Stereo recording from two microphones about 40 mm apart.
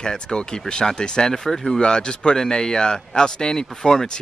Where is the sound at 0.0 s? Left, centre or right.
Centre.